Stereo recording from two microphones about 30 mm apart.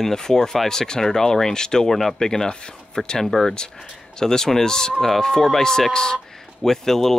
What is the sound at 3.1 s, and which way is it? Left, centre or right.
Speech, centre.